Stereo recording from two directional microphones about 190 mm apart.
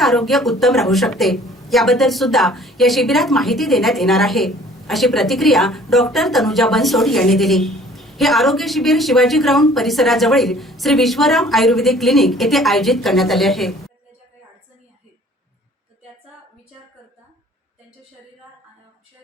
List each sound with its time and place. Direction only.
0.0 s a woman's voice: centre (ahead or behind)